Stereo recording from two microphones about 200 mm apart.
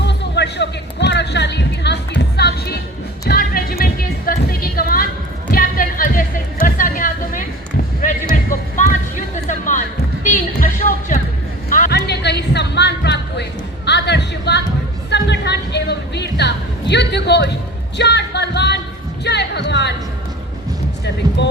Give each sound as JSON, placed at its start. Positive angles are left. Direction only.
{"t": 0.0, "sound": "music", "side_deg": 60}
{"t": 3.2, "sound": "a sound", "side_deg": 50}
{"t": 5.5, "sound": "music", "side_deg": 45}
{"t": 8.4, "sound": "music", "side_deg": 40}
{"t": 11.7, "sound": "a sound", "side_deg": 50}
{"t": 15.1, "sound": "music", "side_deg": 60}
{"t": 21.0, "sound": "music", "side_deg": 60}